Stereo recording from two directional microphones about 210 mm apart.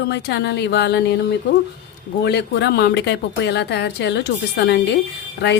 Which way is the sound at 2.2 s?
55° left (ahead or behind).